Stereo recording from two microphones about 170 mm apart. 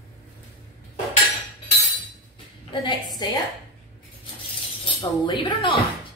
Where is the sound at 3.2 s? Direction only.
25° left (ahead or behind).